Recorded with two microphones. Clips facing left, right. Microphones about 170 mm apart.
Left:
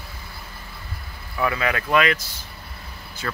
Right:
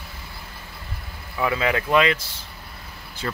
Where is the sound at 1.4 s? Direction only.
20° right (ahead or behind).